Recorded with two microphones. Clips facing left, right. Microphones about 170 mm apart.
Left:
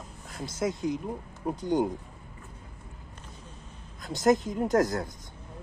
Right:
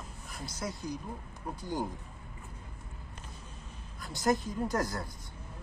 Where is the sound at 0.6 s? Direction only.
20° left (ahead or behind).